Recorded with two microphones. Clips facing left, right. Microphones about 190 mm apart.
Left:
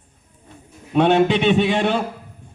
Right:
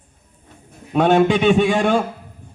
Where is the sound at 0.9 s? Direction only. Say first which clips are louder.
Right 1 dB; 45° right (ahead or behind).